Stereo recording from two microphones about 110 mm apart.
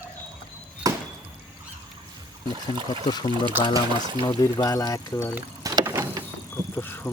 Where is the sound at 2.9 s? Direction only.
40° left (ahead or behind).